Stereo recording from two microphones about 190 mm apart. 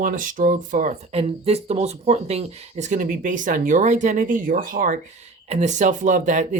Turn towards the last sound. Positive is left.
turn(degrees=-40)  # may be behind; listen again after turning